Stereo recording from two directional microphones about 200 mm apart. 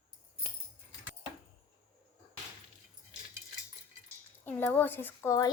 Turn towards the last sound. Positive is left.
turn(degrees=15)  # may be behind; listen again after turning